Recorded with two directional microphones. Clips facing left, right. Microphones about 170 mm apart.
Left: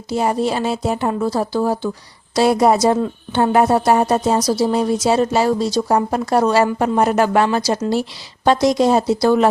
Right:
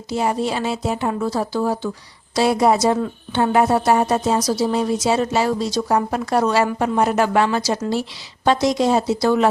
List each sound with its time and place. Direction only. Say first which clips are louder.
0.1 s a woman's voice: left 3 dB; 40° left (ahead or behind)